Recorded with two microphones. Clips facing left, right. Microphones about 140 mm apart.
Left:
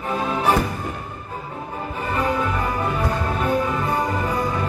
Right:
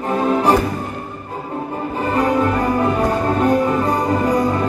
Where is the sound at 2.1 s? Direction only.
35° right (ahead or behind).